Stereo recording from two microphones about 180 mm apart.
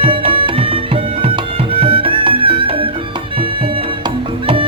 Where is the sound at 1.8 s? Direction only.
30° right (ahead or behind).